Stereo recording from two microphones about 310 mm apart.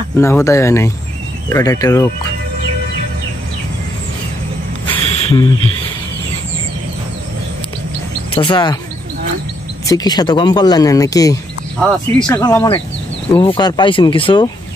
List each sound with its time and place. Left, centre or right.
0.2 s speech: centre
4.9 s a sound: centre
8.4 s speech: centre
9.8 s speech: centre